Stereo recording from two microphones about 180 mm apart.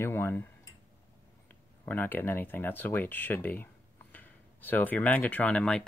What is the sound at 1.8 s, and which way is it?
Speech, 10° left (ahead or behind).